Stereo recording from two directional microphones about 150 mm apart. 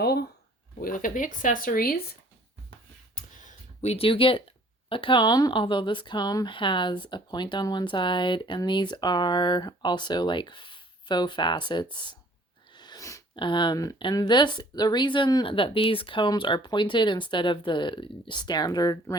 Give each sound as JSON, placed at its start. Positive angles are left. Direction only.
{"t": 0.0, "sound": "a sound", "side_deg": 90}
{"t": 0.8, "sound": "speech", "side_deg": 70}
{"t": 3.2, "sound": "a sound", "side_deg": 50}
{"t": 4.9, "sound": "speech", "side_deg": 35}
{"t": 12.7, "sound": "sneeze", "side_deg": 30}
{"t": 13.3, "sound": "speech", "side_deg": 35}